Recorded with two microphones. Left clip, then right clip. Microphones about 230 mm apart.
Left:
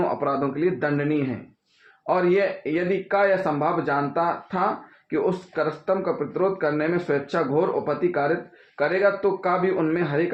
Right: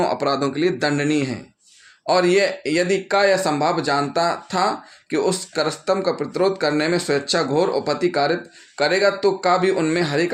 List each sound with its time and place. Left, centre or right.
0.0 s speech: right